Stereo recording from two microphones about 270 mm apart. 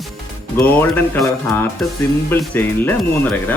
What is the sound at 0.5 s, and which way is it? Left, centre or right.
Speech, centre.